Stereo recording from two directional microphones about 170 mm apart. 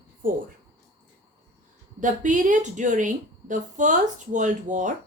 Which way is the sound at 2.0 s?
50° right (ahead or behind).